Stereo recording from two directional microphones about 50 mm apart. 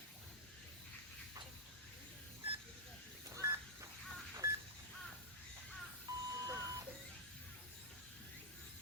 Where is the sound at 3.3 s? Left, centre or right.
Right.